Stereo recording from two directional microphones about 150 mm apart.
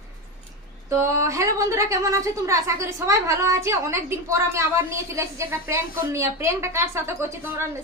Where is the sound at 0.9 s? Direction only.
20° right (ahead or behind).